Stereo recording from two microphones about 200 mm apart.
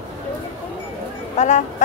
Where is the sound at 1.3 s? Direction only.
35° left (ahead or behind).